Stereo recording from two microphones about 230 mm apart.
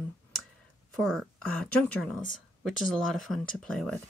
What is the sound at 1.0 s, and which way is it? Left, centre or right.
Speech, centre.